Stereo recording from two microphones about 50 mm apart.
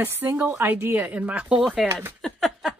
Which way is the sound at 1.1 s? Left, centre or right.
Right.